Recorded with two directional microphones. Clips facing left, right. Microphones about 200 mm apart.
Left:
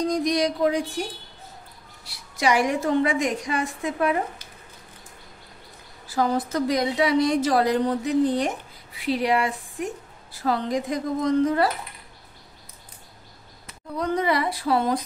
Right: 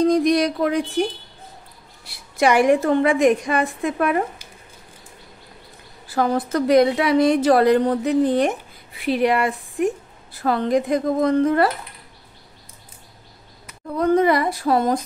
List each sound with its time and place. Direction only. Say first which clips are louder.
0.0 s a woman's voice: right 6 dB; 60° right (ahead or behind)
2.0 s a woman's voice: right 5 dB; 55° right (ahead or behind)
6.0 s a woman's voice: right 3 dB; 60° right (ahead or behind)
13.9 s speech: right 7 dB; 50° right (ahead or behind)